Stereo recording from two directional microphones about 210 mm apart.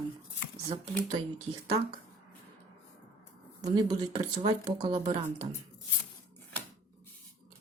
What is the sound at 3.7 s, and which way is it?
A woman's voice, 20° right (ahead or behind).